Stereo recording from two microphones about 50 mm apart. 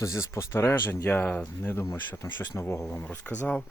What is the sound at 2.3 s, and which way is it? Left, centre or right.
Speech, left.